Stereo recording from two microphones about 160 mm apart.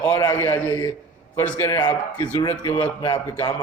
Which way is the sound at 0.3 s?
15° left (ahead or behind).